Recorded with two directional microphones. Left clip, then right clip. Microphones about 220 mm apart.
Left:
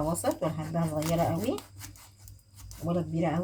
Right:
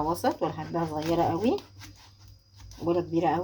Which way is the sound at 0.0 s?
30° right (ahead or behind).